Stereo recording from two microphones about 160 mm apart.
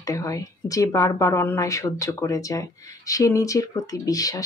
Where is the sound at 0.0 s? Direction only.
20° left (ahead or behind).